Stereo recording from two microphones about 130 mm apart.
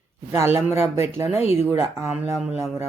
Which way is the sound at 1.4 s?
55° left (ahead or behind).